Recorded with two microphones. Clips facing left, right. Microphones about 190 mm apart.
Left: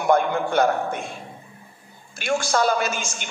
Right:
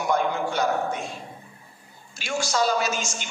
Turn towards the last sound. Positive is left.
turn(degrees=55)  # may be behind; listen again after turning